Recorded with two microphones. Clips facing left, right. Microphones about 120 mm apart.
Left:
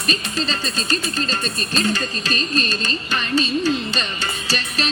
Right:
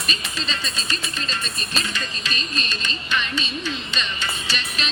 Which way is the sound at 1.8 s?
40° left (ahead or behind).